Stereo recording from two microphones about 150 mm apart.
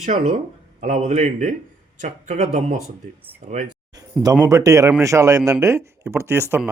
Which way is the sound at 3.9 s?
25° right (ahead or behind).